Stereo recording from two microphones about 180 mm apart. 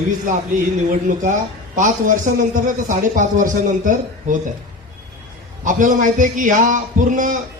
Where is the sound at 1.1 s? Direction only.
45° right (ahead or behind).